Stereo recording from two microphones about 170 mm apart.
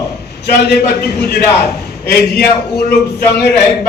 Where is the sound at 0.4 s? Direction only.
75° left (ahead or behind).